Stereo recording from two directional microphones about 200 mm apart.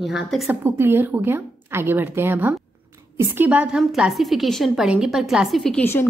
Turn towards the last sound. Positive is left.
turn(degrees=10)  # may be behind; listen again after turning